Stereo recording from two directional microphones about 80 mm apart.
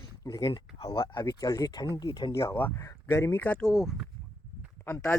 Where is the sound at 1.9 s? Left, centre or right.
Left.